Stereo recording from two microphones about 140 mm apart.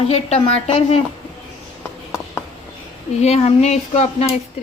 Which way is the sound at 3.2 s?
50° left (ahead or behind).